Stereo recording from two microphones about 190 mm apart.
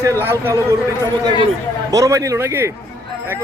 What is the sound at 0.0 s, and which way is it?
Speech, 15° right (ahead or behind).